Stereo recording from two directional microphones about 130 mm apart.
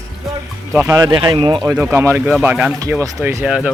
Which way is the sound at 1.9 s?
20° right (ahead or behind).